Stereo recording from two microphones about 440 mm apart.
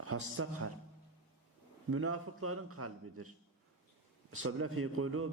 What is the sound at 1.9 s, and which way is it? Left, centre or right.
A man's voice, right.